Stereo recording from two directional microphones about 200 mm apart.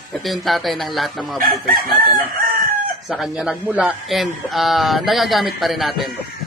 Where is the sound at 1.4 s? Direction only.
45° right (ahead or behind).